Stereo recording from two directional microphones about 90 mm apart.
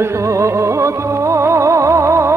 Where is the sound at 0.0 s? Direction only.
30° right (ahead or behind).